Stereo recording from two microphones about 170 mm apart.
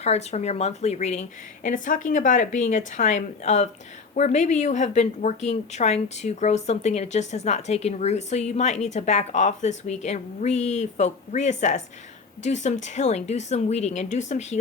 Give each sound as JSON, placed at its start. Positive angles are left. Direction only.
{"t": 0.0, "sound": "a woman's voice", "side_deg": 40}